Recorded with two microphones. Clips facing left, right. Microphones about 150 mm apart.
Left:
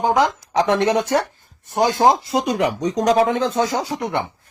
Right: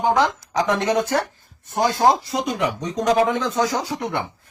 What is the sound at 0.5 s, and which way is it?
Speech, 30° left (ahead or behind).